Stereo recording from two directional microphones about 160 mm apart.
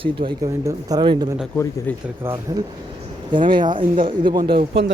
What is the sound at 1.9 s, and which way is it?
Speech, 10° left (ahead or behind).